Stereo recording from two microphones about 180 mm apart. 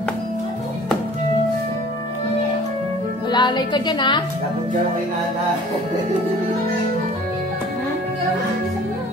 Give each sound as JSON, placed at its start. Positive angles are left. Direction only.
{"t": 3.3, "sound": "speech", "side_deg": 25}